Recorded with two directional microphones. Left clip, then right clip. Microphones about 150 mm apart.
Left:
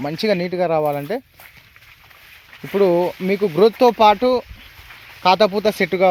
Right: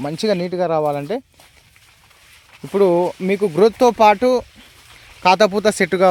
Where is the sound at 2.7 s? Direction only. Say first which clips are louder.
Right 1 dB; 15° right (ahead or behind).